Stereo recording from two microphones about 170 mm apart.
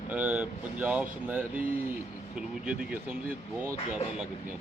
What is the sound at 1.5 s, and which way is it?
Speech, 55° right (ahead or behind).